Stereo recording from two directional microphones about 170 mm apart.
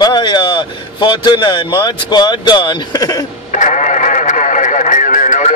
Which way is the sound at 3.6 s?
45° left (ahead or behind).